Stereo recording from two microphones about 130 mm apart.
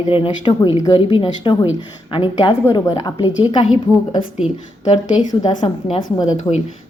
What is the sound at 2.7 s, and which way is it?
Speech, 30° left (ahead or behind).